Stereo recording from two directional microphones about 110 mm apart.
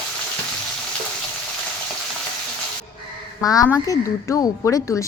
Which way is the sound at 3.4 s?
35° left (ahead or behind).